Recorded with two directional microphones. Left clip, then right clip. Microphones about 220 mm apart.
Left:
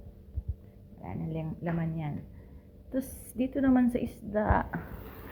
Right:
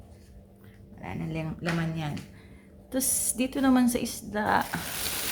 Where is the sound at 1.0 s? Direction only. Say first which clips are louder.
Right 3 dB; 10° right (ahead or behind).